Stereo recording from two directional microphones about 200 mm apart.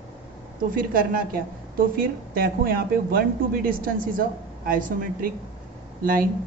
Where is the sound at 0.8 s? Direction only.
45° right (ahead or behind).